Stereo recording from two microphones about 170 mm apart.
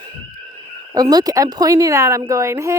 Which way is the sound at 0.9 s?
25° right (ahead or behind).